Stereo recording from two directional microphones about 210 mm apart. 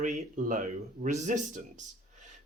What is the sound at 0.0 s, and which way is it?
Speech, 35° right (ahead or behind).